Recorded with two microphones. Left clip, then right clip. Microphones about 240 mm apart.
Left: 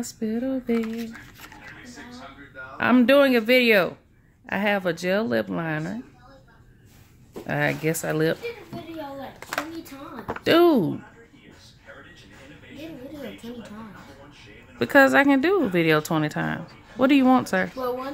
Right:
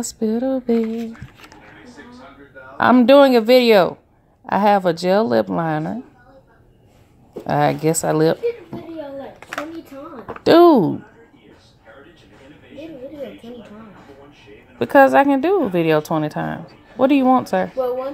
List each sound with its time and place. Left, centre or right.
0.0 s speech: right
2.8 s speech: centre
7.4 s speech: centre
10.4 s speech: centre
14.8 s speech: centre